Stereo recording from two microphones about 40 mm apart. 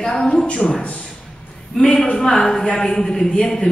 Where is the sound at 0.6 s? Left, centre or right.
Centre.